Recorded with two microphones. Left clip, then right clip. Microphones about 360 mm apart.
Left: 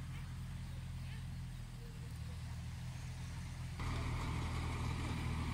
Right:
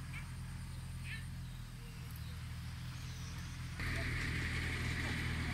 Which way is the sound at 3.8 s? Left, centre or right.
Centre.